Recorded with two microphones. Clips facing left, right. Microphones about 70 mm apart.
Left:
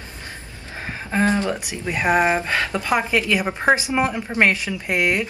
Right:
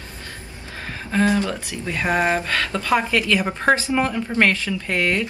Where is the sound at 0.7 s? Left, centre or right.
Left.